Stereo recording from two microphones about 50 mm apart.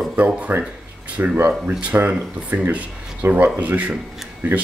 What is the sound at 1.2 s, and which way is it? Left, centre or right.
Speech, right.